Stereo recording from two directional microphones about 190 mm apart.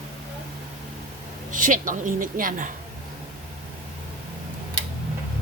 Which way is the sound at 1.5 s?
45° right (ahead or behind).